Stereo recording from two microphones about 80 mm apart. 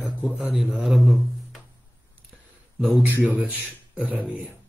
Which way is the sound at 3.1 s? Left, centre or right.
Right.